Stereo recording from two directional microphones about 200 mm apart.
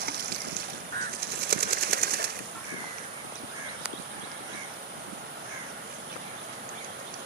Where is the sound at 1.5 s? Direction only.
50° right (ahead or behind).